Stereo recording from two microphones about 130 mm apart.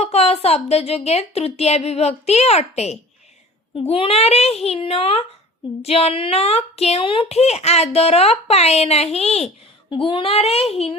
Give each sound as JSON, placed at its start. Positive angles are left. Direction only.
{"t": 0.0, "sound": "a woman's voice", "side_deg": 50}
{"t": 3.8, "sound": "a woman's voice", "side_deg": 45}
{"t": 9.9, "sound": "a woman's voice", "side_deg": 40}